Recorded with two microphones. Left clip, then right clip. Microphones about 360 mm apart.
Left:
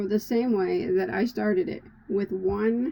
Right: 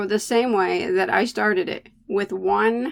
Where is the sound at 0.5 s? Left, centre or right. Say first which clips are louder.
Right 5 dB; centre.